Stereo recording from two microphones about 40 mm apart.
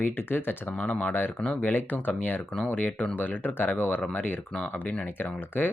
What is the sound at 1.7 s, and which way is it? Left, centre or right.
Speech, left.